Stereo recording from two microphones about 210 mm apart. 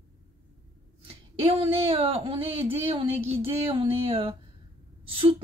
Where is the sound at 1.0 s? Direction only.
25° right (ahead or behind).